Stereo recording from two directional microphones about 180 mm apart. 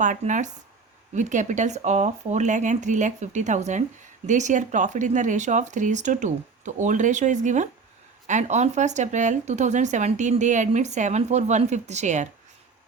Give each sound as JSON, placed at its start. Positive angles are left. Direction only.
{"t": 0.0, "sound": "speech", "side_deg": -45}